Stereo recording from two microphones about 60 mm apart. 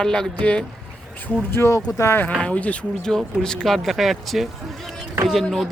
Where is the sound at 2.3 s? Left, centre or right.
Left.